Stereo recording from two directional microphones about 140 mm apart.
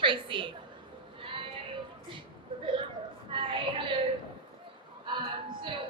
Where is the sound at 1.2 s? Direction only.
40° right (ahead or behind).